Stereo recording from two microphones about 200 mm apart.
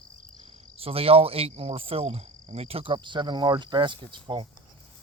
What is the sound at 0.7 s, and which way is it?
Speech, 30° right (ahead or behind).